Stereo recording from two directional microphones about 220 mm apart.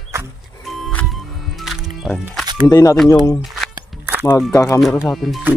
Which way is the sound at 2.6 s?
15° left (ahead or behind).